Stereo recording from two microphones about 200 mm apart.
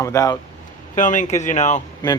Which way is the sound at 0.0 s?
15° left (ahead or behind).